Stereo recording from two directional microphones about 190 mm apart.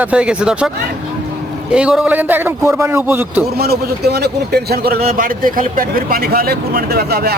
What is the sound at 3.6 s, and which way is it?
Speech, 55° right (ahead or behind).